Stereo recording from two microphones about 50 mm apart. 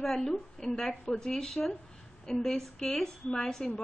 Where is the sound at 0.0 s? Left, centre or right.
Centre.